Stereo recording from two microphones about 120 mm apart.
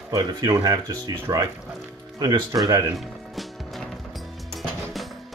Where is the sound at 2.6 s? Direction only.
30° right (ahead or behind).